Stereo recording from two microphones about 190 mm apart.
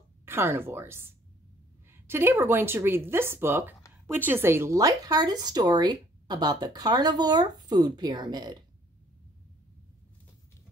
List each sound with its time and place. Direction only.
0.2 s a woman's voice: 10° right (ahead or behind)